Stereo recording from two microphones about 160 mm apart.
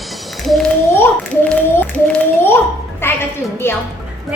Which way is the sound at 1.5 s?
5° left (ahead or behind).